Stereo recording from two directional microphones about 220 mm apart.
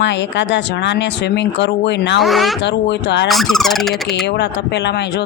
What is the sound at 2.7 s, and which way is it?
Speech, 50° left (ahead or behind).